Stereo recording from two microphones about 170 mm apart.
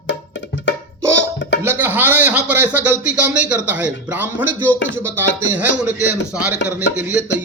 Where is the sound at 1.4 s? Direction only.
90° left.